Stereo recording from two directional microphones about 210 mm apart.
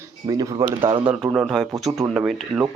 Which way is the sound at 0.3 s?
15° right (ahead or behind).